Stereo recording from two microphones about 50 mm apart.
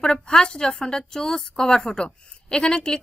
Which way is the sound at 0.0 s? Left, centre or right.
Centre.